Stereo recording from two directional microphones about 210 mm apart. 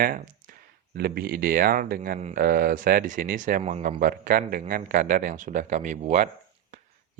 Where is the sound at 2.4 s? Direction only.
45° right (ahead or behind).